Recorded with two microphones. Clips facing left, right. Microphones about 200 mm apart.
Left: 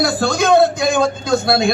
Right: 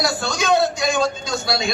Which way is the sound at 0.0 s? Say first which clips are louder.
Left 6 dB; 55° left (ahead or behind).